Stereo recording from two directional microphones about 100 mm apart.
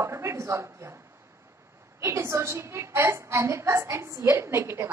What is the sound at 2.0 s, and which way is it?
A woman's voice, 30° right (ahead or behind).